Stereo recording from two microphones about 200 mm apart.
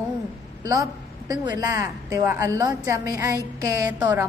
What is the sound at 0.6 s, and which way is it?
A woman's voice, 15° right (ahead or behind).